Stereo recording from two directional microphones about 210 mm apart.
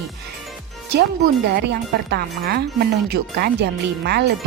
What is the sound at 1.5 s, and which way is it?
Speech, 55° right (ahead or behind).